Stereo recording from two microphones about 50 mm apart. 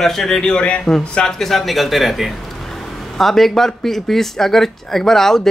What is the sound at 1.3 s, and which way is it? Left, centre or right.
A man's voice, centre.